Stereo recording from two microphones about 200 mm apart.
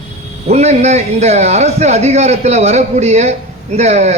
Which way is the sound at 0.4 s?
35° right (ahead or behind).